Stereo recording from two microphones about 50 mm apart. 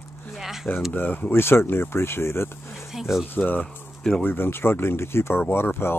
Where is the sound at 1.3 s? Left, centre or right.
Left.